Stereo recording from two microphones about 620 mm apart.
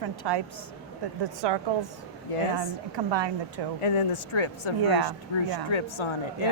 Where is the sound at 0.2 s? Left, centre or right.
Right.